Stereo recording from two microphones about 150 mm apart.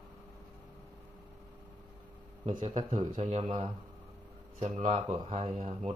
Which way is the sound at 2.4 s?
35° right (ahead or behind).